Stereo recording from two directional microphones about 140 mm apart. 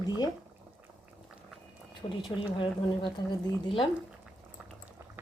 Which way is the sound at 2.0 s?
40° left (ahead or behind).